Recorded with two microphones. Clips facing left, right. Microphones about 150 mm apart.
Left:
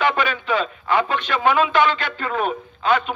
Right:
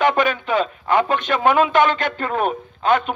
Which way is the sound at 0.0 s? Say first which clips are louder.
Right 3 dB; 45° right (ahead or behind).